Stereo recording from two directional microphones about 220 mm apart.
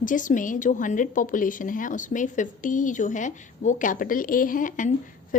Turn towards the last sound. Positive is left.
turn(degrees=35)  # may be behind; listen again after turning